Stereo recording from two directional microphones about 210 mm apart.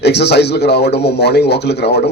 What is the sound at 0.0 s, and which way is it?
A man's voice, 55° left (ahead or behind).